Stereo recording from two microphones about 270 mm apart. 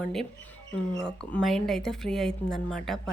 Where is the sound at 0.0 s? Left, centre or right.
Centre.